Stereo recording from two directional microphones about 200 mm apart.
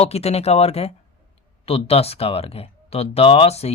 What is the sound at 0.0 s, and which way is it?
Speech, 30° left (ahead or behind).